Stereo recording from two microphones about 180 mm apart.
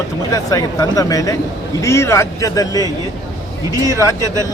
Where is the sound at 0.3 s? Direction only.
20° left (ahead or behind).